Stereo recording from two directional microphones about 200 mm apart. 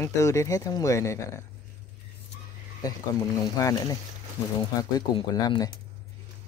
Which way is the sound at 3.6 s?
15° left (ahead or behind).